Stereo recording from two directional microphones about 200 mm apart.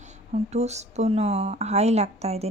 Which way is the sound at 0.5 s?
35° right (ahead or behind).